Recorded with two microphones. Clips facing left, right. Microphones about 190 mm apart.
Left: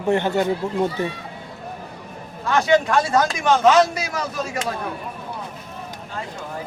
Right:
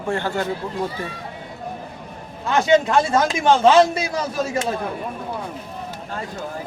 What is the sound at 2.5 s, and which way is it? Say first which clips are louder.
A man's voice: right 1 dB; 20° right (ahead or behind).